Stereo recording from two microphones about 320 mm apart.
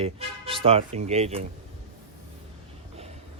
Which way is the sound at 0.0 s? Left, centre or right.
Centre.